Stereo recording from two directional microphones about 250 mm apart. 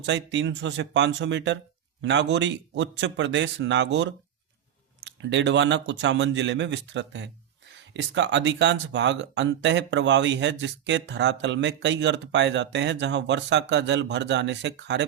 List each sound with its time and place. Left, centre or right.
0.0 s speech: right